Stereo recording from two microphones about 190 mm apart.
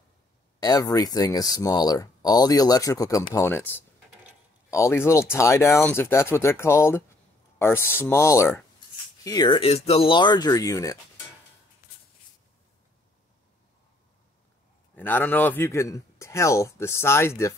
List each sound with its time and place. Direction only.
0.6 s speech: 20° left (ahead or behind)
15.0 s speech: 10° left (ahead or behind)